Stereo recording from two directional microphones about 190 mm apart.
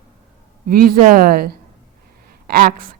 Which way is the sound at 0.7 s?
50° right (ahead or behind).